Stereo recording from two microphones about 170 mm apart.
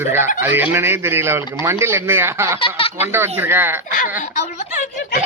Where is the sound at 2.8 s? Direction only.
35° left (ahead or behind).